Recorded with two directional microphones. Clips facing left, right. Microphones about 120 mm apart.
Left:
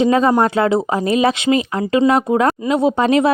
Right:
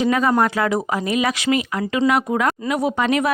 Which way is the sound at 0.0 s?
30° left (ahead or behind).